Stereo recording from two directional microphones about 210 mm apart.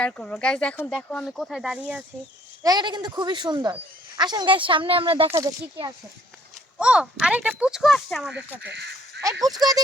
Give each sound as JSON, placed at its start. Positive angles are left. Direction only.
{"t": 0.0, "sound": "speech", "side_deg": 5}
{"t": 2.6, "sound": "speech", "side_deg": -20}
{"t": 6.7, "sound": "speech", "side_deg": -5}
{"t": 8.6, "sound": "crow", "side_deg": -55}